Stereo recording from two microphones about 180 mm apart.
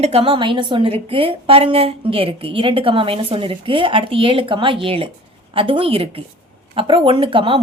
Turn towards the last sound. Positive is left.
turn(degrees=-30)  # may be behind; listen again after turning